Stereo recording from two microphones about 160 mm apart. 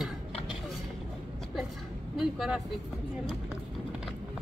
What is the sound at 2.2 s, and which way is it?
Speech, centre (ahead or behind).